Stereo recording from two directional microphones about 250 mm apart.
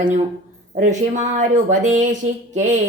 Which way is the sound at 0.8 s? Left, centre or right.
Right.